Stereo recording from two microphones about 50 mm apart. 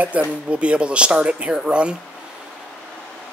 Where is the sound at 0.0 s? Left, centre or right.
Right.